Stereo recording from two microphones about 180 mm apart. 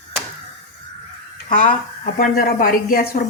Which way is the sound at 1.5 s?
45° left (ahead or behind).